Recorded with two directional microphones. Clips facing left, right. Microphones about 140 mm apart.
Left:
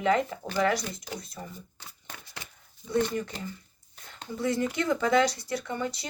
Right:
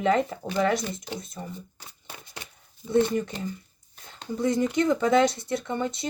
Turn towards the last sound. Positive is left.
turn(degrees=-25)  # may be behind; listen again after turning